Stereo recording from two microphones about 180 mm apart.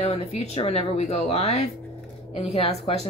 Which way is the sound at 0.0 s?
35° left (ahead or behind).